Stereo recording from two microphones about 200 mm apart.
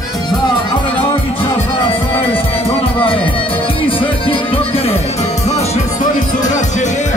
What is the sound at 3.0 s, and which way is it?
Music, 25° left (ahead or behind).